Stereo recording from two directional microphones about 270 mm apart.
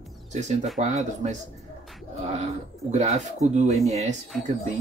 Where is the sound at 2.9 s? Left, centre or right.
Right.